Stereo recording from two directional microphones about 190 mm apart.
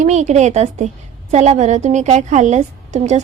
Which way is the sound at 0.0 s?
40° right (ahead or behind).